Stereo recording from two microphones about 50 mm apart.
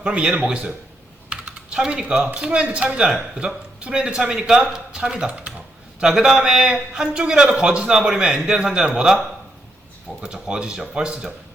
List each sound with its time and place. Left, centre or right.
0.0 s a man's voice: centre
1.3 s typing: right
2.4 s a man's voice: centre